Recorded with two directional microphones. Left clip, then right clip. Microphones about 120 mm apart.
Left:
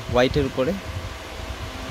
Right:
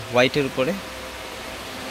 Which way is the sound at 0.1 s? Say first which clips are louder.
Right 1 dB; 20° left (ahead or behind).